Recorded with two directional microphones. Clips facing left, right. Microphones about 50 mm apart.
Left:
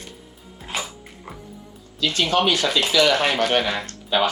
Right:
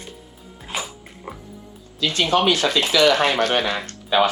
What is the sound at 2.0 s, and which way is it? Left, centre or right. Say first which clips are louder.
Speech: right 1 dB; right.